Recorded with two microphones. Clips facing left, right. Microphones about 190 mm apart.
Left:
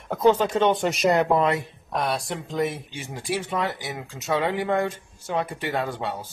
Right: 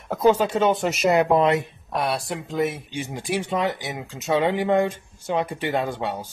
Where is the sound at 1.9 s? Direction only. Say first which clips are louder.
Right 1 dB; 5° right (ahead or behind).